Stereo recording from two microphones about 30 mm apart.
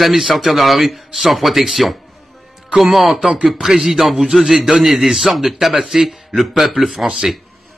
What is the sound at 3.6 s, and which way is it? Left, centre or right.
A man's voice, centre.